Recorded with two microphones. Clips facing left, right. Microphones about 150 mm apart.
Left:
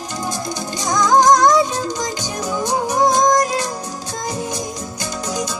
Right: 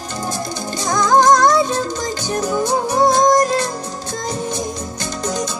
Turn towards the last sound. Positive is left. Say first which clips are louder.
# right 2 dB
turn(degrees=10)  # may be behind; listen again after turning